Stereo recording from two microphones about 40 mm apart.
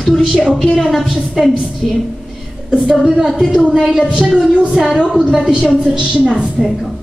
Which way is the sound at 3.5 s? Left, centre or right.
Centre.